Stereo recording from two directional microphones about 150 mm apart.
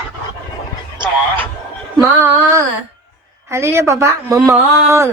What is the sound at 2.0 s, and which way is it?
A woman's voice, 20° right (ahead or behind).